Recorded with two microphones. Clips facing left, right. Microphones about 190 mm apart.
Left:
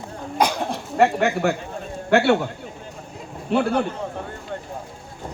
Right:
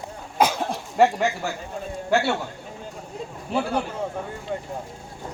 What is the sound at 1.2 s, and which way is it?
A man's voice, 60° left (ahead or behind).